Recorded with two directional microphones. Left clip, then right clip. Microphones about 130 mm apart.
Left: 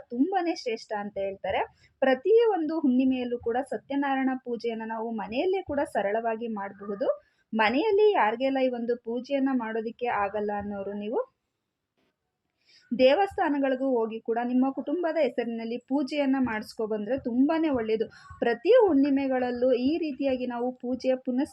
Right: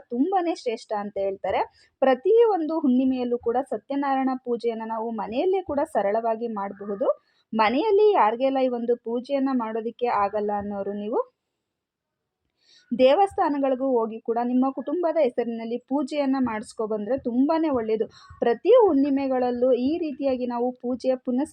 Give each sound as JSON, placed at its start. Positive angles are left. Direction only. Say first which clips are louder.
{"t": 0.1, "sound": "a woman's voice", "louder": "right 3 dB", "side_deg": -35}
{"t": 13.0, "sound": "a woman's voice", "louder": "right 3 dB", "side_deg": -30}